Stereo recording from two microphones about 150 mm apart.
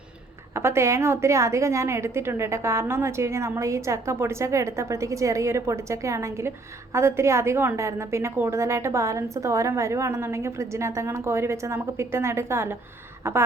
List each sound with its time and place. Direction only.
0.5 s a woman's voice: 15° right (ahead or behind)